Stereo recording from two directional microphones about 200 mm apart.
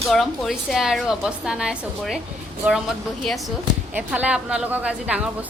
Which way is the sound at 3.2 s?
Centre (ahead or behind).